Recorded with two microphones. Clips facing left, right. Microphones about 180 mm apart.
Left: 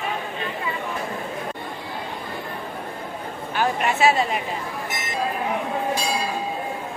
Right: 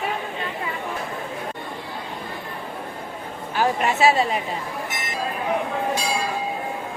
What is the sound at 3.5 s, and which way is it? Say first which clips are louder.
Speech: right 1 dB; 35° right (ahead or behind).